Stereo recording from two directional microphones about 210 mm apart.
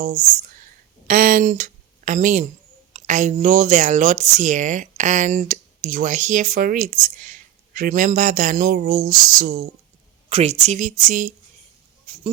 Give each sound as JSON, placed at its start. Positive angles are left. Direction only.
{"t": 0.0, "sound": "speech", "side_deg": -40}
{"t": 1.0, "sound": "a sound", "side_deg": -40}
{"t": 2.9, "sound": "speech", "side_deg": -35}